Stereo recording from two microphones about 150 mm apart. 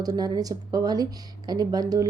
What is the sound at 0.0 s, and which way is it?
A woman's voice, 25° right (ahead or behind).